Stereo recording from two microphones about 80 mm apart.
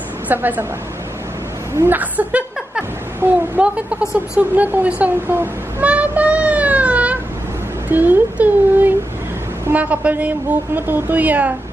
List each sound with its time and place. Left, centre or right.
0.3 s a woman's voice: right
1.9 s a woman's voice: right
3.5 s a woman's voice: centre
5.9 s child singing: centre
7.9 s a woman's voice: right